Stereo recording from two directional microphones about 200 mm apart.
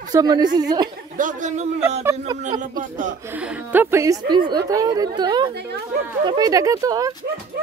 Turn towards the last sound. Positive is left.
turn(degrees=-15)  # may be behind; listen again after turning